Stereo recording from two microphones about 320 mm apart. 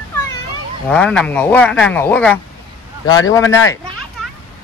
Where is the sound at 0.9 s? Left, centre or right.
Centre.